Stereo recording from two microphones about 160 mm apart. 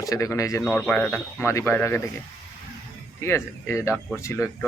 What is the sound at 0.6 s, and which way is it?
Speech, 10° left (ahead or behind).